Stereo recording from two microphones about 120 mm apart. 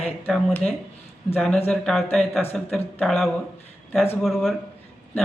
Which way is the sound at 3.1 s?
Centre (ahead or behind).